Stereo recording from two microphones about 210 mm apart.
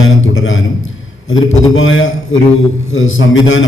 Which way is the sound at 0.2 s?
70° left (ahead or behind).